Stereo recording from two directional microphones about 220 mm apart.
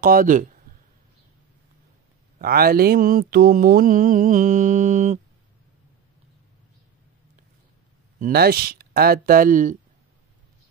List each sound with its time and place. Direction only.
0.0 s mantra: 40° right (ahead or behind)
2.3 s mantra: 45° right (ahead or behind)
8.2 s speech: 45° right (ahead or behind)